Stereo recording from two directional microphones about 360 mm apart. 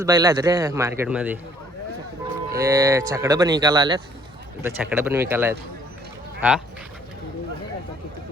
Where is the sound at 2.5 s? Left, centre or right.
Centre.